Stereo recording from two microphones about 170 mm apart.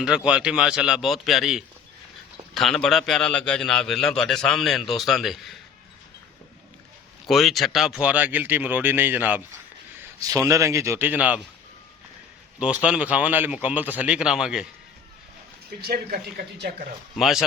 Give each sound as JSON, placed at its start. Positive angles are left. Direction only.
{"t": 0.0, "sound": "a man's voice", "side_deg": -5}
{"t": 7.3, "sound": "a man's voice", "side_deg": 0}
{"t": 10.2, "sound": "a man's voice", "side_deg": -20}
{"t": 12.5, "sound": "a man's voice", "side_deg": -5}
{"t": 15.8, "sound": "speech", "side_deg": -60}
{"t": 17.2, "sound": "a man's voice", "side_deg": 0}